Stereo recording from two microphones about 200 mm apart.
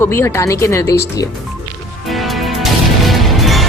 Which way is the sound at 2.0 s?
Centre (ahead or behind).